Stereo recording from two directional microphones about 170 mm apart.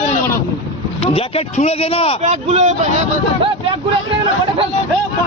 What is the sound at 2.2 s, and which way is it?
Speech, 40° right (ahead or behind).